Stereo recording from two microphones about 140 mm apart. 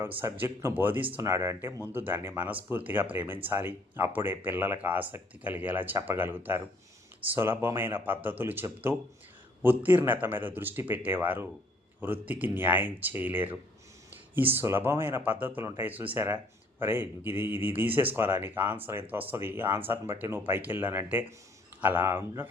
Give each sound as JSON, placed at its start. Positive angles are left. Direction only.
{"t": 0.0, "sound": "speech", "side_deg": -15}